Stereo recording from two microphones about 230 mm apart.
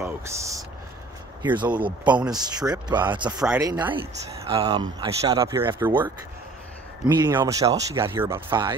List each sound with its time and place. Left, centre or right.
0.0 s speech: centre
7.2 s speech: centre